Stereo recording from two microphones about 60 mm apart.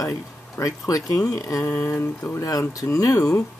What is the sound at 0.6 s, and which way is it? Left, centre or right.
Speech, left.